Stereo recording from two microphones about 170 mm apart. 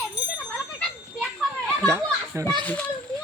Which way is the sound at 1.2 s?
5° left (ahead or behind).